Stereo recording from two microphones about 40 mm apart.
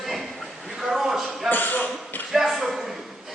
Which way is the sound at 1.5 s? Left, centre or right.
Left.